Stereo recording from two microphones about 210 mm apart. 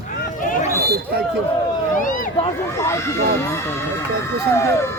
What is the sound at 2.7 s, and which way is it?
Speech, 15° left (ahead or behind).